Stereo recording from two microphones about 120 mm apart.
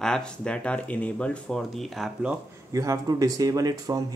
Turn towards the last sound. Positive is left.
turn(degrees=-30)  # may be behind; listen again after turning